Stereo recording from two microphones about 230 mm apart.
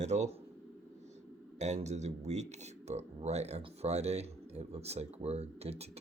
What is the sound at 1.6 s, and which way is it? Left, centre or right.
Speech, right.